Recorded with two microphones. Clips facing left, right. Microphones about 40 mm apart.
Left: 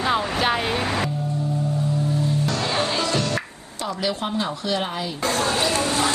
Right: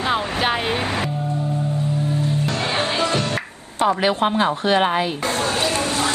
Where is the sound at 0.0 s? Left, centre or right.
Centre; by 5.2 s right.